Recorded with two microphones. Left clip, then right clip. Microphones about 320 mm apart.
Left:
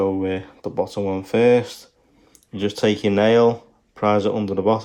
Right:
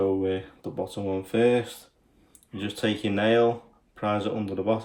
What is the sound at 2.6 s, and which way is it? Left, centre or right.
Speech, centre.